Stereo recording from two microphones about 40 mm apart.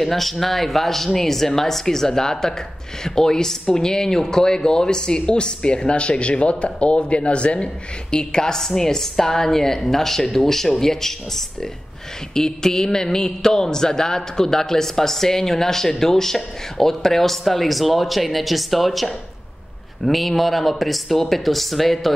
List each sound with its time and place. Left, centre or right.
0.0 s a man's voice: centre